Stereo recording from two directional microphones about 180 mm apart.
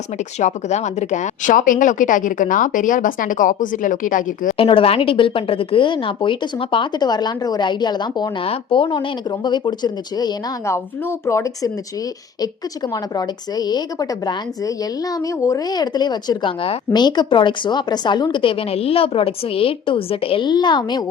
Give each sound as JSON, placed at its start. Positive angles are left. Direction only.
{"t": 0.3, "sound": "a woman's voice", "side_deg": 40}
{"t": 4.5, "sound": "speech", "side_deg": 30}
{"t": 12.9, "sound": "speech", "side_deg": 20}